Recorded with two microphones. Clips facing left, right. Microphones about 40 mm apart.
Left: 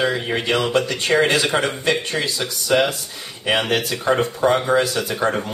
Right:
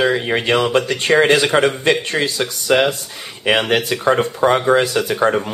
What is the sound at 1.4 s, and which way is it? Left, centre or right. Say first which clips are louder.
Speech: right 5 dB; centre.